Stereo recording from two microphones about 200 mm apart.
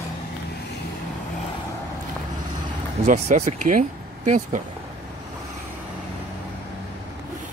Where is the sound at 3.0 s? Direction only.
35° right (ahead or behind).